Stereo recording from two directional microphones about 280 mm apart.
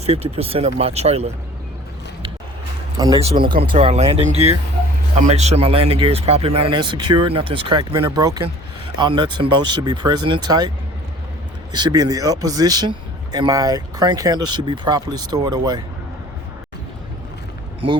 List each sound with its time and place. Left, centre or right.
0.0 s speech: right
3.0 s speech: centre
11.7 s speech: centre
17.8 s speech: centre